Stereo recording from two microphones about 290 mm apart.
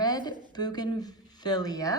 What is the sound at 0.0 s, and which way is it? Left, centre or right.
A woman's voice, centre.